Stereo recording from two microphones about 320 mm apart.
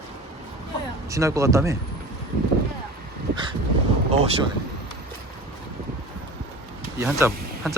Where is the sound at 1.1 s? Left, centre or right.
Centre.